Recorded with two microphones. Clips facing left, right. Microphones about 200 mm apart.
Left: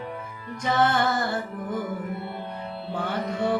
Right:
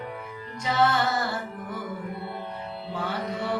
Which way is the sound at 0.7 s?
55° left (ahead or behind).